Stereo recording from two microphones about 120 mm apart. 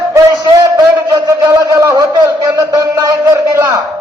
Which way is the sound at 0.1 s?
30° right (ahead or behind).